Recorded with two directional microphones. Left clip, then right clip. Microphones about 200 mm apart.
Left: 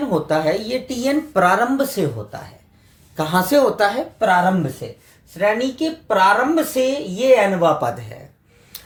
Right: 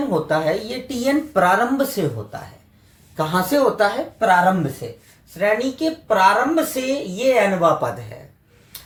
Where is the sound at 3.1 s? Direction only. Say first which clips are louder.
Left 2 dB; 40° left (ahead or behind).